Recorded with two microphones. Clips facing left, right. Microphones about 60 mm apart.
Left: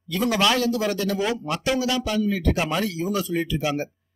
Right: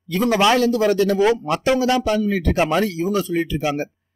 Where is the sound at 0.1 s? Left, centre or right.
Right.